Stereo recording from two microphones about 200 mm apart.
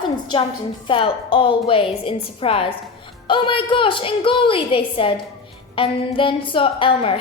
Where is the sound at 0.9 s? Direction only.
25° left (ahead or behind).